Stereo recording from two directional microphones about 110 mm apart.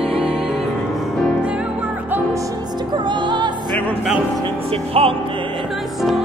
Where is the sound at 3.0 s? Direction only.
45° right (ahead or behind).